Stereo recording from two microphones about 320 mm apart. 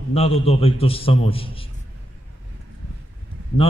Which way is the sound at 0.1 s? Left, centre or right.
Centre.